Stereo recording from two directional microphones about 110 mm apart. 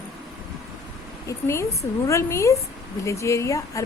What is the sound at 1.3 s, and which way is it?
A woman's voice, 25° left (ahead or behind).